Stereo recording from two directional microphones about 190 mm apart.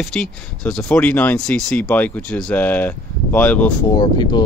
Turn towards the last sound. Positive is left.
turn(degrees=25)  # may be behind; listen again after turning